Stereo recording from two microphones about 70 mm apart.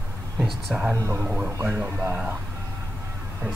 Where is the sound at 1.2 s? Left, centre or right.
Right.